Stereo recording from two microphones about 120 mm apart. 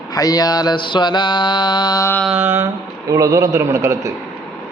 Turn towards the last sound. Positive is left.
turn(degrees=-25)  # may be behind; listen again after turning